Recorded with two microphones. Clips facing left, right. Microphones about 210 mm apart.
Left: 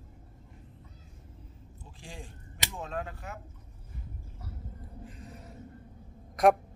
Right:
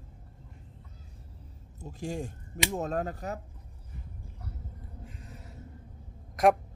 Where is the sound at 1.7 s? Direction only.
45° right (ahead or behind).